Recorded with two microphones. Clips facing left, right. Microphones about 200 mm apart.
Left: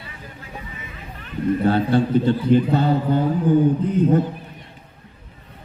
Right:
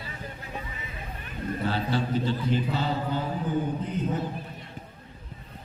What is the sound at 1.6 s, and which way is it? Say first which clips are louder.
A man's voice: left 9 dB; 55° left (ahead or behind).